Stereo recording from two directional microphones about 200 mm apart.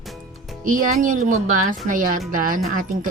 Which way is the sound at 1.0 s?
40° right (ahead or behind).